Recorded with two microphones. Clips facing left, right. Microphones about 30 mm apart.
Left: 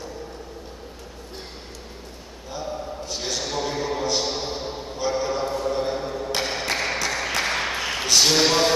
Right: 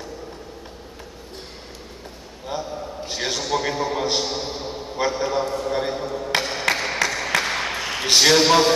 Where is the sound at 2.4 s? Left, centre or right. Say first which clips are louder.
Right 2 dB; right.